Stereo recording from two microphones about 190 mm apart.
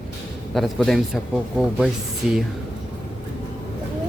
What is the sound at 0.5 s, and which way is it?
Speech, centre (ahead or behind).